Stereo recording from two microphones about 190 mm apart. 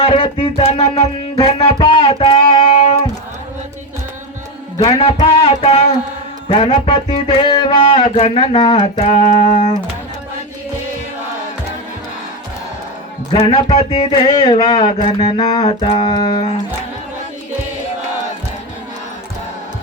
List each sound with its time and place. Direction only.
0.0 s music: 30° left (ahead or behind)
4.8 s a sound: 25° left (ahead or behind)
6.5 s music: 30° left (ahead or behind)
8.0 s speech: 30° left (ahead or behind)
13.3 s speech: 30° left (ahead or behind)
14.3 s music: 25° left (ahead or behind)